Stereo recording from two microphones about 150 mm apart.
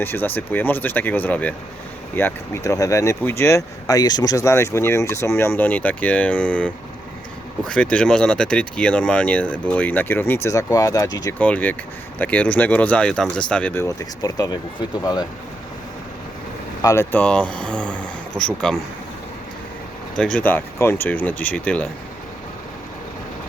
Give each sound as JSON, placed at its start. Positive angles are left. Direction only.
{"t": 0.0, "sound": "speech", "side_deg": 15}
{"t": 11.3, "sound": "speech", "side_deg": 10}
{"t": 16.8, "sound": "speech", "side_deg": 15}
{"t": 20.1, "sound": "speech", "side_deg": 5}